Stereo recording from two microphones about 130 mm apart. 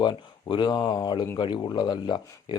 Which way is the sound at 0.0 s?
35° left (ahead or behind).